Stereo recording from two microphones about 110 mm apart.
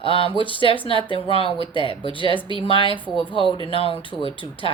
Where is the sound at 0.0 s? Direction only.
55° left (ahead or behind).